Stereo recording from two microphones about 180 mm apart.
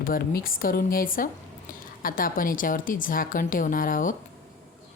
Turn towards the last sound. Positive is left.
turn(degrees=50)  # may be behind; listen again after turning